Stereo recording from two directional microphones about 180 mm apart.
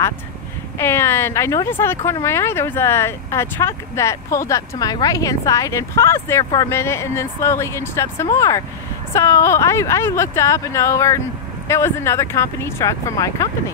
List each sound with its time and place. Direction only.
0.7 s speech: 15° left (ahead or behind)